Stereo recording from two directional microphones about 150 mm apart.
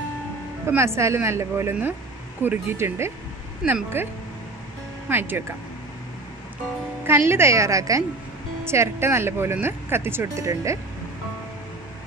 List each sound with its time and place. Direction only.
0.7 s speech: 15° right (ahead or behind)
5.1 s speech: 15° right (ahead or behind)
7.1 s a woman's voice: 15° right (ahead or behind)